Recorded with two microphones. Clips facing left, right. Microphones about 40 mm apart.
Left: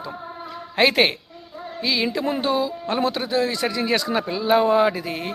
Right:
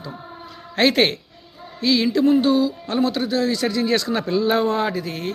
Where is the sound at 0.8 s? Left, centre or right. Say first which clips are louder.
Even; centre.